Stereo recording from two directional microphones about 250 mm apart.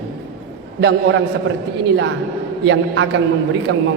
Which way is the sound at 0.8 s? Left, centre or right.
Right.